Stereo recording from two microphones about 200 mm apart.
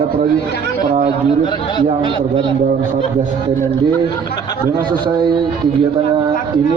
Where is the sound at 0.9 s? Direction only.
35° right (ahead or behind).